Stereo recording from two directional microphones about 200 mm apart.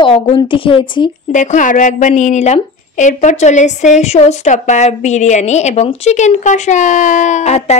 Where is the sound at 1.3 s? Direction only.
40° left (ahead or behind).